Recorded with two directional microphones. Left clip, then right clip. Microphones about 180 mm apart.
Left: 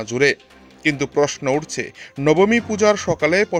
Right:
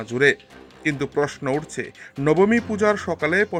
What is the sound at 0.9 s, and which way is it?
Speech, 45° left (ahead or behind).